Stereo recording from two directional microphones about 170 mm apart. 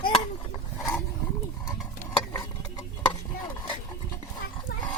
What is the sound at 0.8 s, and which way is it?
Roaring cats, centre (ahead or behind).